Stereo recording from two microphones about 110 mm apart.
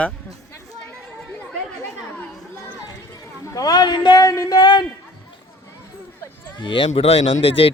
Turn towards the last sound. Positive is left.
turn(degrees=60)  # may be behind; listen again after turning